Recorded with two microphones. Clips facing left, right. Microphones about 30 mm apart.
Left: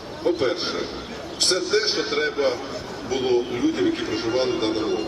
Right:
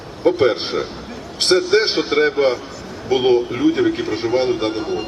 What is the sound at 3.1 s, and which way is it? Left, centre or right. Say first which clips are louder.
Speech: right 6 dB; right.